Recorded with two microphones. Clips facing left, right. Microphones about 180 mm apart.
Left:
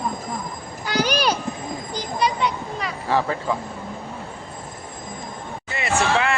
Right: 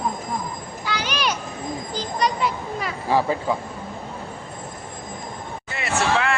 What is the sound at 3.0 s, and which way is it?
Speech, 15° right (ahead or behind).